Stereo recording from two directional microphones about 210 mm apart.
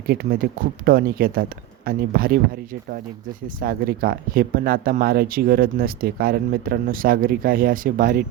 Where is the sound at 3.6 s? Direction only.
45° right (ahead or behind).